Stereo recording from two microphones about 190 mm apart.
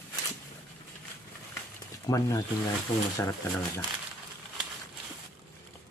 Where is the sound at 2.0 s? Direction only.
20° left (ahead or behind).